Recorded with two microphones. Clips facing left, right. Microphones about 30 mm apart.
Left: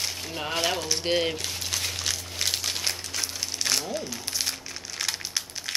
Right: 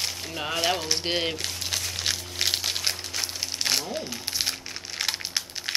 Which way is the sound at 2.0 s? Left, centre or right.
Centre.